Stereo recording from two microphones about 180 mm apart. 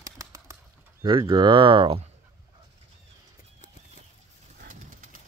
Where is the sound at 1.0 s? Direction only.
25° right (ahead or behind).